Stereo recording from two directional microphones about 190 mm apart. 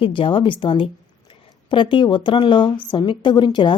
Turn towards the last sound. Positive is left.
turn(degrees=25)  # may be behind; listen again after turning